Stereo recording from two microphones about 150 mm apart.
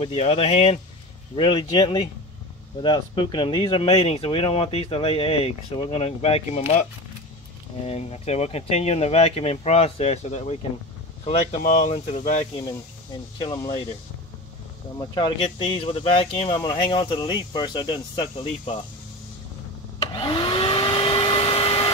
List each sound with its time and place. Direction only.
0.0 s speech: 45° left (ahead or behind)
7.8 s speech: 45° left (ahead or behind)
11.8 s speech: 50° left (ahead or behind)
13.4 s speech: 30° left (ahead or behind)
15.0 s speech: 30° left (ahead or behind)
20.1 s vacuum cleaner: 35° left (ahead or behind)